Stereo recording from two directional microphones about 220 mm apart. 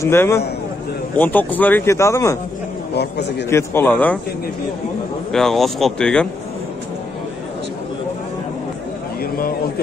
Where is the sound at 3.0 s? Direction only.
50° left (ahead or behind).